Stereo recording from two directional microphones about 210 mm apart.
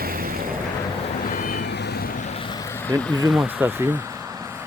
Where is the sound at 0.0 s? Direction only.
45° right (ahead or behind).